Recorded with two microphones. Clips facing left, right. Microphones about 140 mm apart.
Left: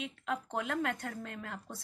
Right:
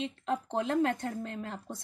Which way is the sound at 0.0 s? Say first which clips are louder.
Right 4 dB; 25° right (ahead or behind).